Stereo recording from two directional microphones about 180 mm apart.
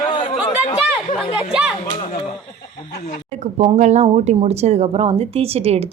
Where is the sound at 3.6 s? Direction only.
40° right (ahead or behind).